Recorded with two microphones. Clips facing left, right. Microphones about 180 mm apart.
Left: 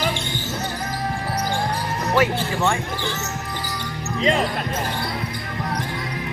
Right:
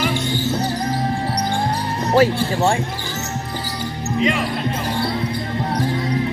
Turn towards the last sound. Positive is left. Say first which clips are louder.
# right 1 dB
turn(degrees=35)  # may be behind; listen again after turning